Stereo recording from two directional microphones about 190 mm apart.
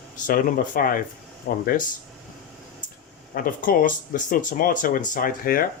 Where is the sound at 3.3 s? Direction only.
45° left (ahead or behind).